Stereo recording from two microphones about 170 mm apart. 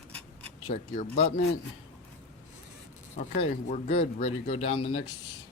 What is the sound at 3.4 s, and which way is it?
Speech, 45° left (ahead or behind).